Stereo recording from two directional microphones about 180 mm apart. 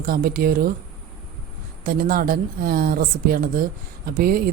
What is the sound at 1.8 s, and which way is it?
Speech, 55° right (ahead or behind).